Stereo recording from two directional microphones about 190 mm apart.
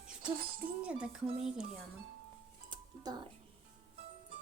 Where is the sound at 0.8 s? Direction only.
5° right (ahead or behind).